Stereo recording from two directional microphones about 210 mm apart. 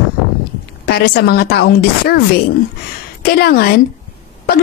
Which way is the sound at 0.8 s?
50° left (ahead or behind).